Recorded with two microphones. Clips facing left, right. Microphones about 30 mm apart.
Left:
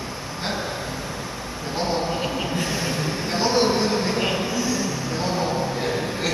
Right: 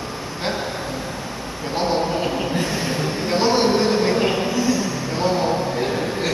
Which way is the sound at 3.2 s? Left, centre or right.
Right.